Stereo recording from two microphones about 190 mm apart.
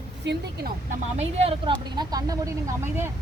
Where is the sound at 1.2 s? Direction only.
30° right (ahead or behind).